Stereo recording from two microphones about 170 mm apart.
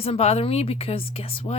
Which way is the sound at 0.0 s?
35° left (ahead or behind).